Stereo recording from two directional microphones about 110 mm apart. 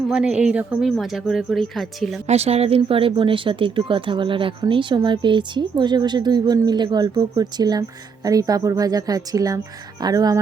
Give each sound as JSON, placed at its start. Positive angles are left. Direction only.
{"t": 0.1, "sound": "a woman's voice", "side_deg": -10}
{"t": 2.2, "sound": "a woman's voice", "side_deg": -75}